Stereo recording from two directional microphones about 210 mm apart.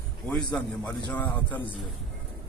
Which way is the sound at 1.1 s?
10° left (ahead or behind).